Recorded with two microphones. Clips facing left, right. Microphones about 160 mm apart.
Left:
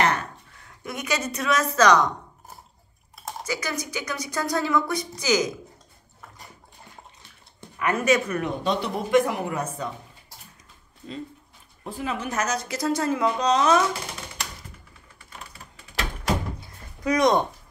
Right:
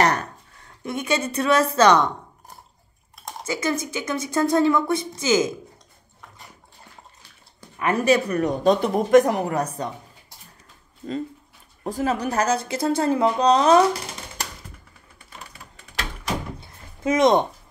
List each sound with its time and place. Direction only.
0.8 s a woman's voice: 25° right (ahead or behind)
3.4 s a woman's voice: 25° right (ahead or behind)
7.8 s speech: 30° right (ahead or behind)
11.0 s speech: 50° right (ahead or behind); by 13.8 s 35° right (ahead or behind)
16.5 s a sound: 25° right (ahead or behind)